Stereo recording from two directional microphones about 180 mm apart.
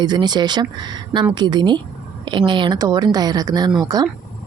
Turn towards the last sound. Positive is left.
turn(degrees=-20)  # may be behind; listen again after turning